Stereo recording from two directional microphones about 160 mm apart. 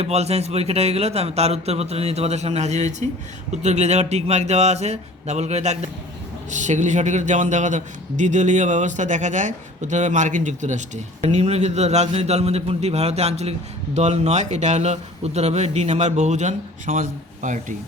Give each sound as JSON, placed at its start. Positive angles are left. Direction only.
{"t": 0.0, "sound": "a man's voice", "side_deg": -40}